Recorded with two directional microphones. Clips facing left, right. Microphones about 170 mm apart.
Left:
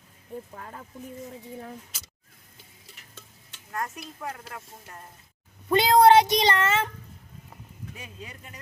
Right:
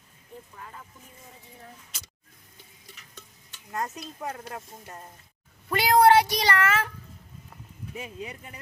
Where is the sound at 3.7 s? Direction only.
20° right (ahead or behind).